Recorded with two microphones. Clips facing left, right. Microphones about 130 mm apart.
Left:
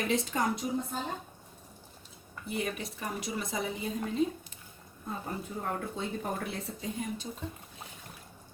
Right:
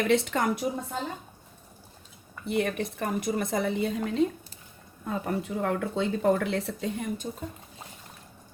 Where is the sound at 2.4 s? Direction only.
70° right (ahead or behind).